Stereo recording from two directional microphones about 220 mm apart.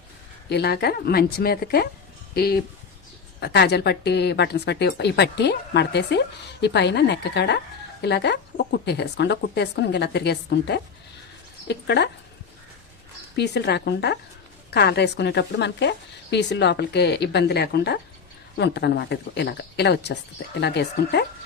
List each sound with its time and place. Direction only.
0.5 s speech: 45° left (ahead or behind)
13.3 s speech: 50° left (ahead or behind)